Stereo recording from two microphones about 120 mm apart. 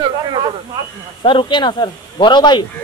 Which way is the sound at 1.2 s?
45° left (ahead or behind).